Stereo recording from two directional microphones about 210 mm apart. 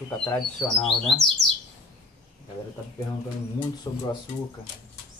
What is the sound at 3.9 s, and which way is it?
Speech, 20° left (ahead or behind).